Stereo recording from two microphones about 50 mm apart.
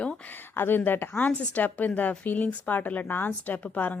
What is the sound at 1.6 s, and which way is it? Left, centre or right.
Speech, left.